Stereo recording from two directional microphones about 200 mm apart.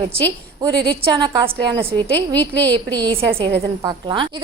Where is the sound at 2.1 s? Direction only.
10° left (ahead or behind).